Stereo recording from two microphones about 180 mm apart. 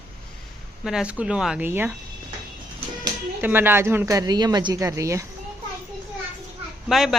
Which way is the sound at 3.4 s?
10° right (ahead or behind).